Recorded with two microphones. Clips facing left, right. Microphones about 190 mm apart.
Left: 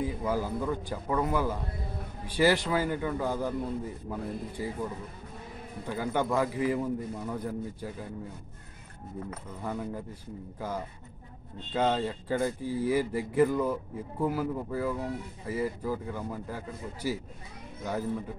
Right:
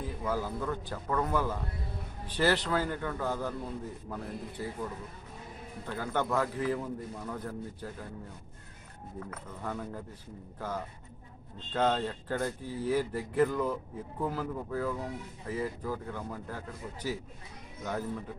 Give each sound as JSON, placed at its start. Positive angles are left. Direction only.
{"t": 0.0, "sound": "speech", "side_deg": 10}
{"t": 5.9, "sound": "speech", "side_deg": 10}
{"t": 9.6, "sound": "speech", "side_deg": 10}
{"t": 11.7, "sound": "speech", "side_deg": 10}